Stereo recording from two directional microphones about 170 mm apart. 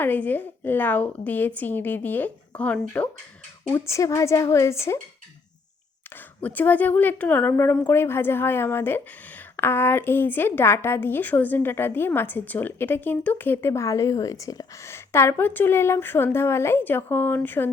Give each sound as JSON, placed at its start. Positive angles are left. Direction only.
{"t": 0.0, "sound": "a woman's voice", "side_deg": 10}
{"t": 6.1, "sound": "a woman's voice", "side_deg": 10}